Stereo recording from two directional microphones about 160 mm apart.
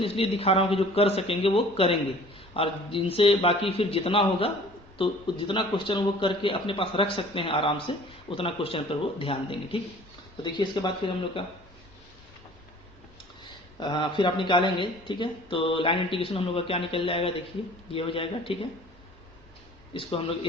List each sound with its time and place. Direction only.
0.0 s a man's voice: 35° left (ahead or behind)
13.4 s a man's voice: 30° left (ahead or behind)
19.9 s a man's voice: 35° left (ahead or behind)